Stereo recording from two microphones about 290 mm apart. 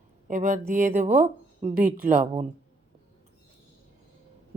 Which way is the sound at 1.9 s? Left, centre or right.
Right.